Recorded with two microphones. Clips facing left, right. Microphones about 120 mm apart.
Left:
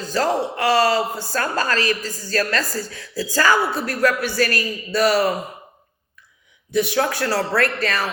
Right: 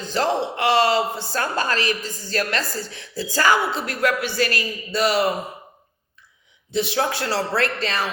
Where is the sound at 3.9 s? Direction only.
20° right (ahead or behind).